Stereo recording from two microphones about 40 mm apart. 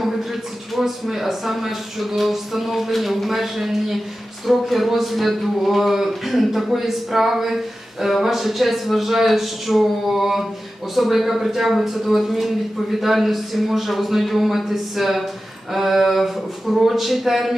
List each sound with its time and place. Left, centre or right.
0.8 s speech: centre